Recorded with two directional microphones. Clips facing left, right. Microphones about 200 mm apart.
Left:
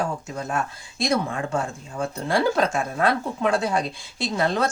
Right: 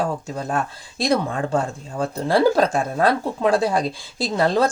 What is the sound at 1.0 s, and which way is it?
Speech, 35° right (ahead or behind).